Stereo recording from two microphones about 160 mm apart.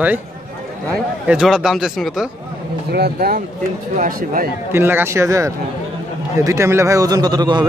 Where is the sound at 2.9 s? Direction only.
80° right.